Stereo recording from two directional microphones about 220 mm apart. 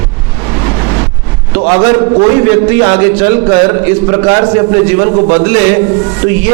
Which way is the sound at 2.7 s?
15° right (ahead or behind).